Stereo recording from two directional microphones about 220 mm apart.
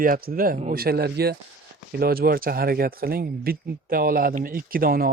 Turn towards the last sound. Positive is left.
turn(degrees=-40)  # may be behind; listen again after turning